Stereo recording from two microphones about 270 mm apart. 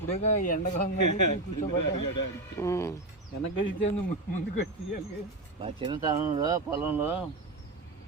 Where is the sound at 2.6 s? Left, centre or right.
Centre.